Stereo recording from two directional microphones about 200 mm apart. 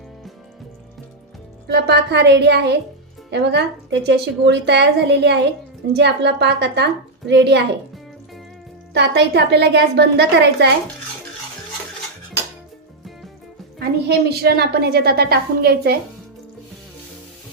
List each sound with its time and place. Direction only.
1.6 s speech: 55° right (ahead or behind)
8.9 s speech: 60° right (ahead or behind)
13.7 s a woman's voice: 55° right (ahead or behind)